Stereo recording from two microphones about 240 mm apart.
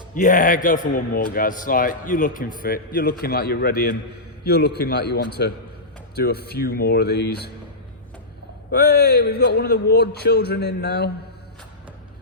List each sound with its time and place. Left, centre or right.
0.1 s a man's voice: left
8.7 s a man's voice: left